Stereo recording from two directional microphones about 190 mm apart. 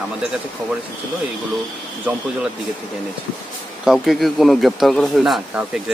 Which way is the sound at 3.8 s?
Centre (ahead or behind).